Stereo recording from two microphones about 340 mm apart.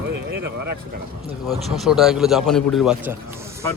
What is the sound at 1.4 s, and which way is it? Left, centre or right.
A man's voice, centre.